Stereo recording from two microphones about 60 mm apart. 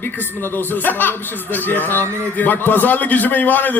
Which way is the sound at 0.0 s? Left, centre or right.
Left.